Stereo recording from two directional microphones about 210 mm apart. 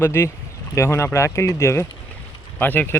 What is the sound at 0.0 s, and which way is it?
Speech, 10° left (ahead or behind).